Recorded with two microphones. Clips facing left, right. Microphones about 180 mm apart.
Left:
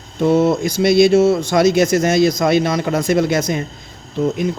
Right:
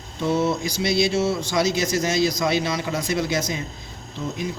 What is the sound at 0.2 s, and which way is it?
Speech, 55° left (ahead or behind).